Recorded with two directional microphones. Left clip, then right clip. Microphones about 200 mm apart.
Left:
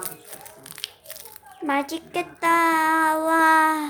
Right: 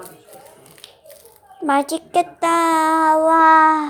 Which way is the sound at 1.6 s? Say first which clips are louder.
Right 6 dB; 25° right (ahead or behind).